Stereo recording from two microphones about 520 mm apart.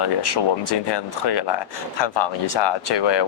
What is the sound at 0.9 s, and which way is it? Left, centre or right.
Speech, left.